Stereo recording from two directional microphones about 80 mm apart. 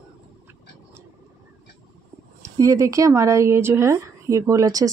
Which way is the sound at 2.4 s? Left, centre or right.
Right.